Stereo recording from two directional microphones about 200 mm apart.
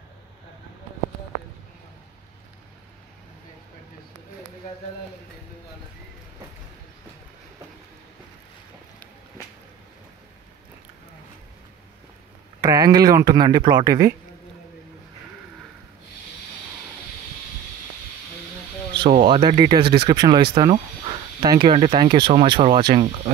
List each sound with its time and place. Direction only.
12.6 s speech: 15° right (ahead or behind)
19.0 s speech: 30° right (ahead or behind)